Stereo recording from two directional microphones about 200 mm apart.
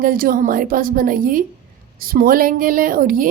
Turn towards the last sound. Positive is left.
turn(degrees=-45)  # may be behind; listen again after turning